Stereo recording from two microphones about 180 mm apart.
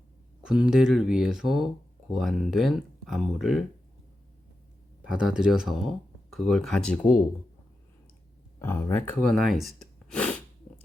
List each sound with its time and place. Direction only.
0.4 s speech: 5° right (ahead or behind)
5.0 s speech: 5° right (ahead or behind)
8.5 s speech: 15° left (ahead or behind)